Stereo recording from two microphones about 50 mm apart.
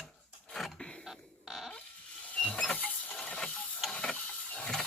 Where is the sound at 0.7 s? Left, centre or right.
Left.